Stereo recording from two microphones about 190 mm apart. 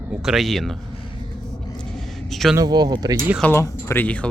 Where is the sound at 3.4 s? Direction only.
15° left (ahead or behind).